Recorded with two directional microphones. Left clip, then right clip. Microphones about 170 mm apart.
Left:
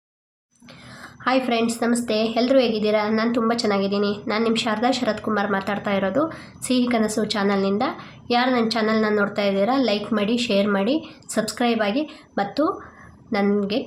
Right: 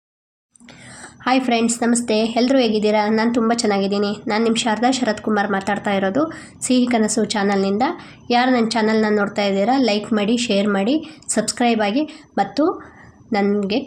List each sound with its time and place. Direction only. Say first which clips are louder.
1.0 s a woman's voice: right 3 dB; 20° right (ahead or behind)